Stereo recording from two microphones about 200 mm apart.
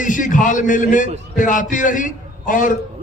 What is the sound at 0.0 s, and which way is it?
A man's voice, 40° left (ahead or behind).